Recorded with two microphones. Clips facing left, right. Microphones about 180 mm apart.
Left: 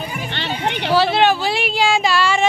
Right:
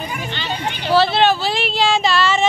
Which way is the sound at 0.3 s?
65° left (ahead or behind).